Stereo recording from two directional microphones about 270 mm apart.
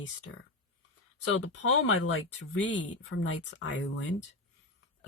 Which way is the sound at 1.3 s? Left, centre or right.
Left.